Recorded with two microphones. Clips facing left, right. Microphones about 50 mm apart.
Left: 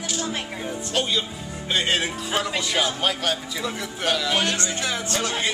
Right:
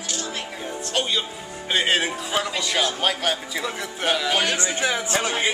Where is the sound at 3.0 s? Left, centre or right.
Centre.